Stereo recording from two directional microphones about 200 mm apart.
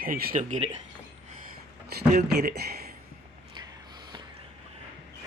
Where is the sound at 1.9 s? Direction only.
55° right (ahead or behind).